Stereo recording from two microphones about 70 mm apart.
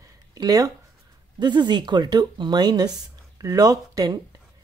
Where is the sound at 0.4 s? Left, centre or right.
Right.